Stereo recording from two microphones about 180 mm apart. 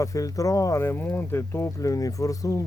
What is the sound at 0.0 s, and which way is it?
Speech, 20° left (ahead or behind).